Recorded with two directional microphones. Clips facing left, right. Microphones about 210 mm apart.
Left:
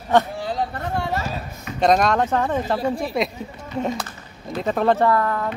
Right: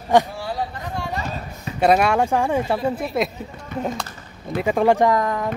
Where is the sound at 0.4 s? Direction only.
20° left (ahead or behind).